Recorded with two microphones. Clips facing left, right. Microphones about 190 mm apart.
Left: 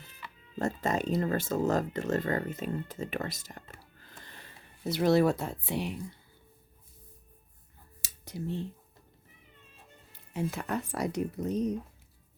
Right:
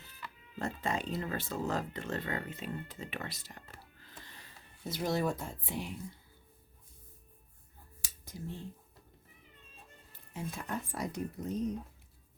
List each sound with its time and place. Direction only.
0.6 s speech: 45° left (ahead or behind)
4.8 s speech: 70° left (ahead or behind)
8.0 s a sound: 70° left (ahead or behind)
10.1 s speech: 75° left (ahead or behind)